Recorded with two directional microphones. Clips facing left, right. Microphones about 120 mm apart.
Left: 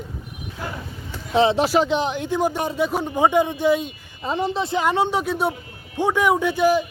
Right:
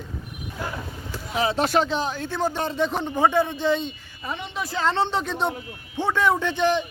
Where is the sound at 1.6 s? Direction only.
10° left (ahead or behind).